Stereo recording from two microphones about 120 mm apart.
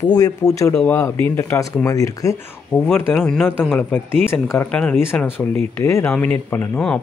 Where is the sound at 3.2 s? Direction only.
5° left (ahead or behind).